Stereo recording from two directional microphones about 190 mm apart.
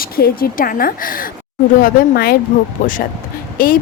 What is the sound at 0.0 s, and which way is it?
Speech, 50° left (ahead or behind).